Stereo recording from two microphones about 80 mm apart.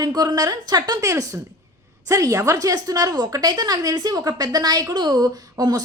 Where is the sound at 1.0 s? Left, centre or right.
Right.